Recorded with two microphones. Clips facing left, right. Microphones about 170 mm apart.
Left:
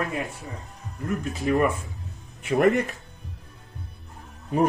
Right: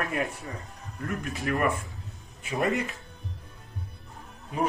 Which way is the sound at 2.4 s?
65° left (ahead or behind).